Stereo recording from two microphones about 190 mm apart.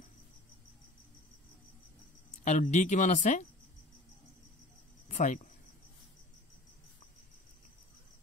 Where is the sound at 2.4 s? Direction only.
40° left (ahead or behind).